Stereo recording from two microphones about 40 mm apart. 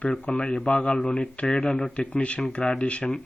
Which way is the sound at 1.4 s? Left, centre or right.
Centre.